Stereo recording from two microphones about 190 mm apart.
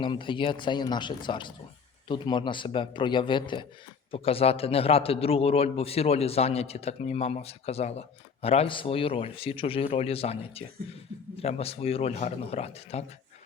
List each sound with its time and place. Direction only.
0.0 s a man's voice: 25° left (ahead or behind)